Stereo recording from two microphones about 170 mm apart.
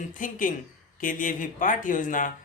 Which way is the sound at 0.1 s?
50° left (ahead or behind).